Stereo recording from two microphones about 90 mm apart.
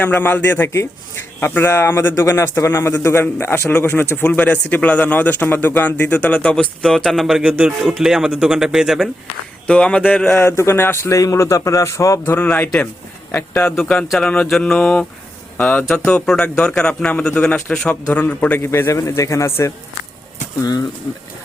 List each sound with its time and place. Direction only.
0.0 s a man's voice: 20° left (ahead or behind); by 7.4 s centre (ahead or behind)
7.4 s music: 15° right (ahead or behind)
7.8 s speech: 5° right (ahead or behind)
9.6 s speech: 10° left (ahead or behind)
10.3 s a man's voice: 30° left (ahead or behind)
12.2 s a man's voice: 20° left (ahead or behind)
13.7 s a man's voice: 10° left (ahead or behind)
18.7 s a man's voice: 30° left (ahead or behind)
20.6 s speech: 50° left (ahead or behind)